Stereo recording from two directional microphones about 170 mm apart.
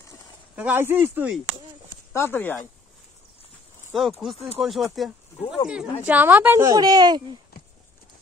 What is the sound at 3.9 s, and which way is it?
A woman's voice, centre (ahead or behind).